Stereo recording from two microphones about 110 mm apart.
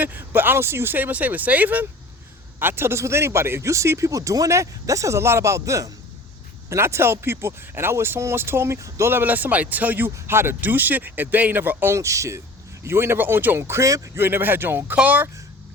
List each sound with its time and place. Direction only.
0.0 s speech: 15° right (ahead or behind)